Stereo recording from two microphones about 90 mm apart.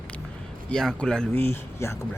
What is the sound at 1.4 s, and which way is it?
Speech, 25° left (ahead or behind).